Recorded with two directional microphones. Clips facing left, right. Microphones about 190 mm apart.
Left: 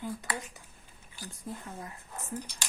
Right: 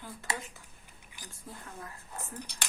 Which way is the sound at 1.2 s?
15° right (ahead or behind).